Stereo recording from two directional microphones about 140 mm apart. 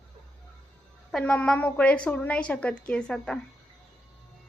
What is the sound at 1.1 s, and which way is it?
A woman's voice, 5° left (ahead or behind).